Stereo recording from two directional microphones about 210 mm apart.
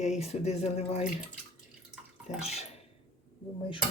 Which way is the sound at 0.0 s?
30° left (ahead or behind).